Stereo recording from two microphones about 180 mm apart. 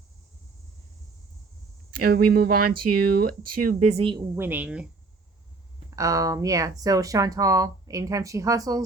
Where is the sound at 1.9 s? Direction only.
55° right (ahead or behind); by 4.3 s 25° right (ahead or behind).